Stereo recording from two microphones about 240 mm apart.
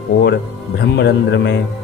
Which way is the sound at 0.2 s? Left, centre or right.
Left.